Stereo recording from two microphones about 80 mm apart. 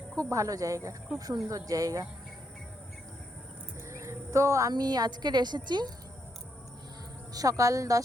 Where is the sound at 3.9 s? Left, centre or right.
Right.